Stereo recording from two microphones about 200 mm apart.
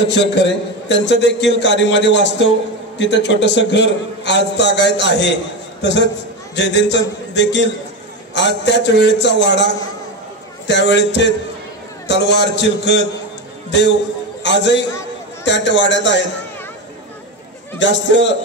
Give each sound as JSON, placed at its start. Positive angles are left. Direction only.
{"t": 0.0, "sound": "a man's voice", "side_deg": 60}
{"t": 10.7, "sound": "a man's voice", "side_deg": 60}
{"t": 17.7, "sound": "a man's voice", "side_deg": 65}